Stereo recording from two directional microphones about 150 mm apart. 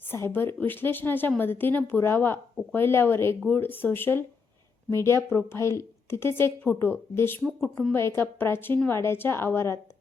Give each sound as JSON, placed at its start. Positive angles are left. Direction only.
{"t": 0.0, "sound": "a woman's voice", "side_deg": 15}